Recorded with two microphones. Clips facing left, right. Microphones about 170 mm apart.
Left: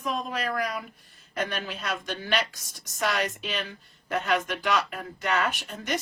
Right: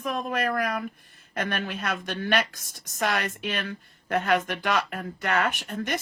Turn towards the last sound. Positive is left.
turn(degrees=-55)  # may be behind; listen again after turning